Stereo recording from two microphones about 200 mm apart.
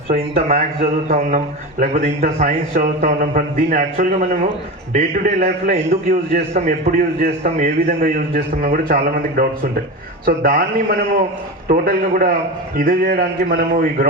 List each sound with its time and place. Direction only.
0.5 s a man's voice: 45° right (ahead or behind)